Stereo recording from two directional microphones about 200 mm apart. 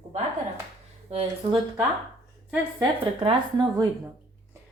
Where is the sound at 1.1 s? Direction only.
30° right (ahead or behind).